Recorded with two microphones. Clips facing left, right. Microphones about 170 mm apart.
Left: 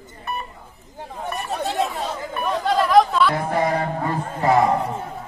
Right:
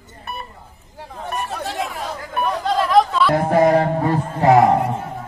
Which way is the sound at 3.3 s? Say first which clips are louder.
Right 7 dB; 50° right (ahead or behind).